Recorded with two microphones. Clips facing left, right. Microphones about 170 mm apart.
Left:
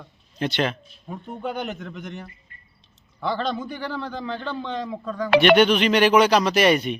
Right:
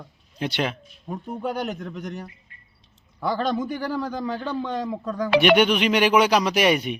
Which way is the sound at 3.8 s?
40° right (ahead or behind).